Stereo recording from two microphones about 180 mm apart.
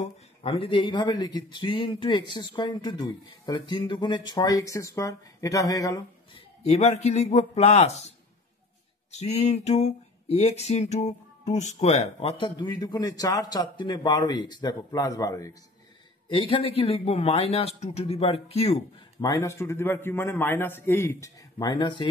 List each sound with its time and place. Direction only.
0.0 s speech: 35° left (ahead or behind); by 6.0 s 20° left (ahead or behind)
6.6 s speech: 35° left (ahead or behind)
9.1 s speech: 35° left (ahead or behind)
12.5 s speech: 25° left (ahead or behind)
16.3 s speech: 30° left (ahead or behind)
19.2 s a man's voice: 15° left (ahead or behind)